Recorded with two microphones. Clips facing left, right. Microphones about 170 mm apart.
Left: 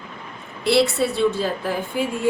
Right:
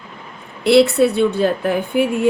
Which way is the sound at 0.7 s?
55° right (ahead or behind).